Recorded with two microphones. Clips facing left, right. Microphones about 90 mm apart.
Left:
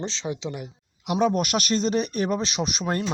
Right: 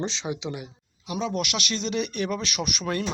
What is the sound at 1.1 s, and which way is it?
Speech, 60° left (ahead or behind).